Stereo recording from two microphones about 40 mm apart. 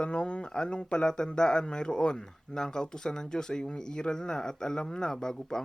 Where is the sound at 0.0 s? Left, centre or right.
Left.